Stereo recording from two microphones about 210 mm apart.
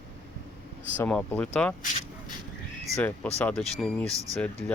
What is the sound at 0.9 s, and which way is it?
Speech, 10° left (ahead or behind).